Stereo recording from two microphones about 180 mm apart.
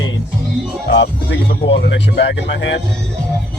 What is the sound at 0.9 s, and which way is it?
Speech, 75° left (ahead or behind).